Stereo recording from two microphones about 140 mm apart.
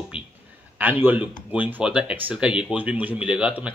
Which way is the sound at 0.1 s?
40° left (ahead or behind).